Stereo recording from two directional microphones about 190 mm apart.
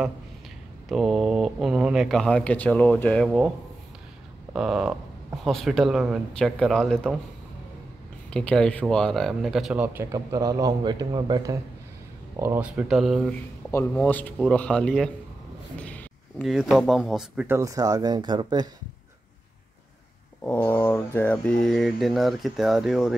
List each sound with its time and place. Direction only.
0.8 s speech: centre (ahead or behind)
4.6 s speech: 5° right (ahead or behind)
8.3 s speech: 5° left (ahead or behind)
10.1 s a man's voice: 20° right (ahead or behind); by 13.4 s centre (ahead or behind)
13.7 s a man's voice: 10° left (ahead or behind); by 18.7 s 20° right (ahead or behind)
20.4 s speech: 10° left (ahead or behind)